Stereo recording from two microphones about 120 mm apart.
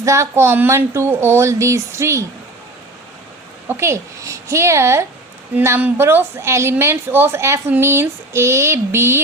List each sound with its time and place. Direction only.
0.0 s a woman's voice: 25° right (ahead or behind)
3.7 s a woman's voice: 20° right (ahead or behind)